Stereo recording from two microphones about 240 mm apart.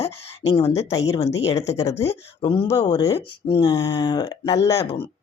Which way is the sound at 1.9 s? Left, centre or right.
Left.